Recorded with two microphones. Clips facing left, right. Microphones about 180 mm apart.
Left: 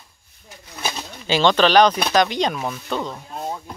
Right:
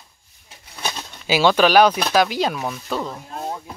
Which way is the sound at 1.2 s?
10° right (ahead or behind).